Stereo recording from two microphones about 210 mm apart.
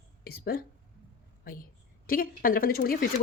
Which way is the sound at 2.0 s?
45° left (ahead or behind).